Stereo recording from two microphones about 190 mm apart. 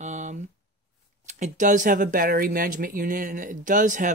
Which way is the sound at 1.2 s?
40° right (ahead or behind).